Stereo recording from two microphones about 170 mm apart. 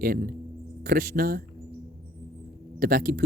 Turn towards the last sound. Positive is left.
turn(degrees=-55)  # may be behind; listen again after turning